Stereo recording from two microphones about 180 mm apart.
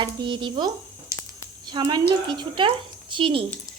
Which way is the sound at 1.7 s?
25° right (ahead or behind).